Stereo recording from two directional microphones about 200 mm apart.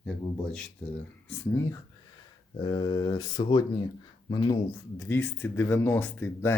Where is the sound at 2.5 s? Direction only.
20° left (ahead or behind).